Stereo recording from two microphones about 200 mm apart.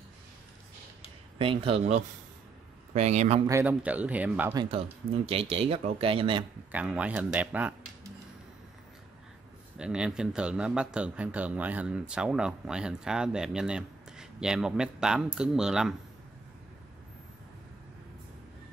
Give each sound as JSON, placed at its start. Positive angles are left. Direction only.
{"t": 1.4, "sound": "speech", "side_deg": -25}
{"t": 3.4, "sound": "a man's voice", "side_deg": -10}
{"t": 4.6, "sound": "speech", "side_deg": -30}
{"t": 6.7, "sound": "a man's voice", "side_deg": -5}
{"t": 9.8, "sound": "speech", "side_deg": -5}